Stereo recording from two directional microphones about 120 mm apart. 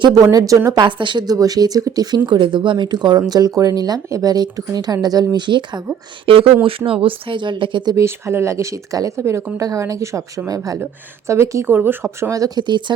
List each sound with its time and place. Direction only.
0.0 s speech: 30° right (ahead or behind)
7.9 s a woman's voice: 20° right (ahead or behind); by 12.8 s 40° right (ahead or behind)